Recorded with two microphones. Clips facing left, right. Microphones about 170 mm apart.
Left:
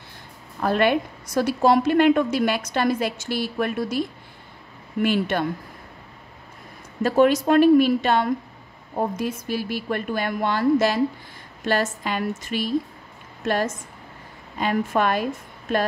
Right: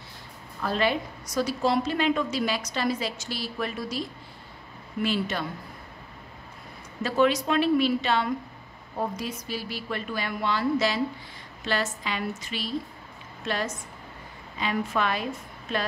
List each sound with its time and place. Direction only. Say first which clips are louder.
0.6 s a woman's voice: left 6 dB; 60° left (ahead or behind)
5.0 s a woman's voice: left 6 dB; 55° left (ahead or behind)
7.0 s a woman's voice: left 5 dB; 50° left (ahead or behind)